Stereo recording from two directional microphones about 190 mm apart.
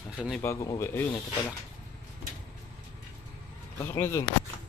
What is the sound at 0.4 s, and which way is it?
Speech, 15° left (ahead or behind).